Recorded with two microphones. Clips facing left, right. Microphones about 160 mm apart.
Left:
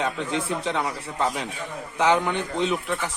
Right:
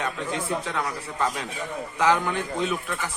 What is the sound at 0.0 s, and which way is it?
Speech, 25° left (ahead or behind).